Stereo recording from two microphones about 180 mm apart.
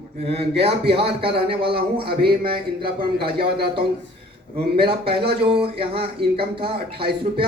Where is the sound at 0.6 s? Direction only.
30° right (ahead or behind).